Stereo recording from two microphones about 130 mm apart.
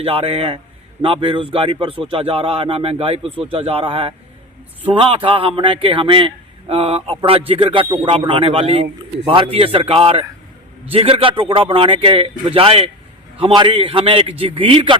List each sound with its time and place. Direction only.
0.0 s speech: 50° right (ahead or behind)